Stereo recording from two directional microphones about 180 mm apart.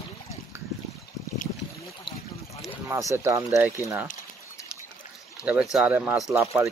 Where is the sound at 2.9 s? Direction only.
15° right (ahead or behind).